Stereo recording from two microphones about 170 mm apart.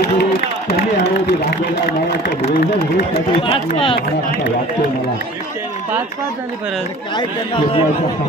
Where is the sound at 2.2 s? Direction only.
90° left.